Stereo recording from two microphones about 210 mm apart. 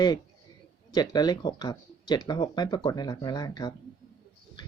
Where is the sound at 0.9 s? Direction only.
20° left (ahead or behind).